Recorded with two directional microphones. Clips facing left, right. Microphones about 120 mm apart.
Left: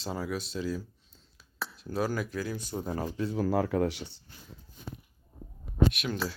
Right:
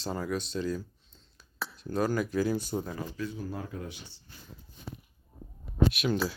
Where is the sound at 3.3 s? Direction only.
90° left; by 4.1 s 70° left (ahead or behind).